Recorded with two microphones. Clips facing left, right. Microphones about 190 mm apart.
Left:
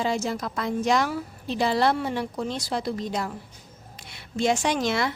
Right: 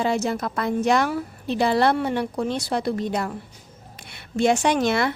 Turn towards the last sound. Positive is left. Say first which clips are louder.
# right 4 dB
turn(degrees=-55)  # may be behind; listen again after turning